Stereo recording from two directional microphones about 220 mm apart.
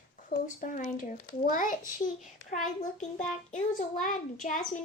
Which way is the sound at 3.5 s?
35° left (ahead or behind).